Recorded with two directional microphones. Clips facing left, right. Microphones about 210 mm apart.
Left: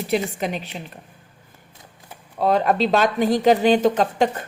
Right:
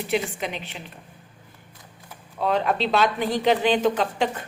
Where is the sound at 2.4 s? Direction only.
40° left (ahead or behind).